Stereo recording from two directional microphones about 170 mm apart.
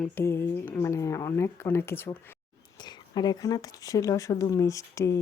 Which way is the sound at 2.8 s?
25° left (ahead or behind).